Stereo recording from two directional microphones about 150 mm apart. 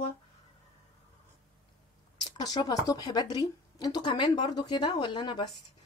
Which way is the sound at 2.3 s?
25° left (ahead or behind).